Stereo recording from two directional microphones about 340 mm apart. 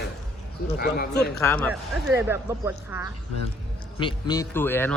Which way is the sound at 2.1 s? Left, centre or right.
Centre.